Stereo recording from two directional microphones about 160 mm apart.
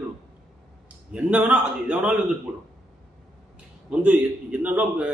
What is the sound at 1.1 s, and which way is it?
A man's voice, 10° right (ahead or behind).